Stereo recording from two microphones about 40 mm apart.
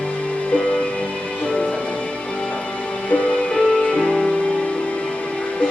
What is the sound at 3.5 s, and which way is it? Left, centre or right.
Music, centre.